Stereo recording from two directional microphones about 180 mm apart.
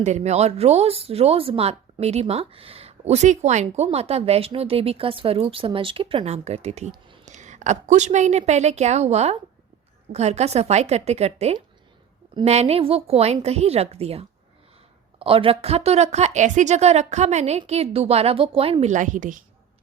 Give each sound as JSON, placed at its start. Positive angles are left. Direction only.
{"t": 0.0, "sound": "a woman's voice", "side_deg": -40}